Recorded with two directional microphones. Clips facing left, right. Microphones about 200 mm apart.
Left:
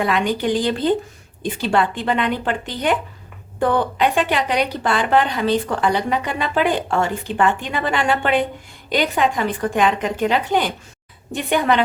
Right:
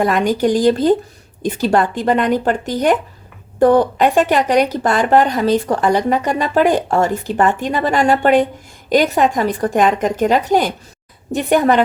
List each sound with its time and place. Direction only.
0.0 s a woman's voice: 45° right (ahead or behind)